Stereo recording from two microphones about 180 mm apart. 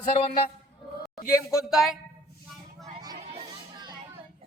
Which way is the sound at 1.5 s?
Centre (ahead or behind).